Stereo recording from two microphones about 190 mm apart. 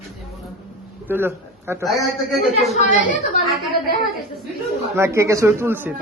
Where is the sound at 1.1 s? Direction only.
10° right (ahead or behind).